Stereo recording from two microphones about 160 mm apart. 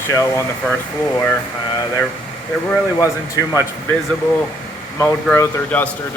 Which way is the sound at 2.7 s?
20° left (ahead or behind).